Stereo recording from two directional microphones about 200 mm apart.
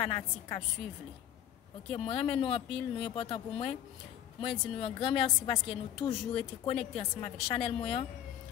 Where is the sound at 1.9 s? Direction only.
30° left (ahead or behind).